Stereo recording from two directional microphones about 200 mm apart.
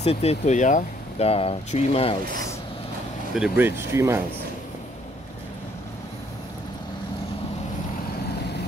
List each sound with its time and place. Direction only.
0.0 s speech: 30° left (ahead or behind)
3.3 s speech: 5° right (ahead or behind)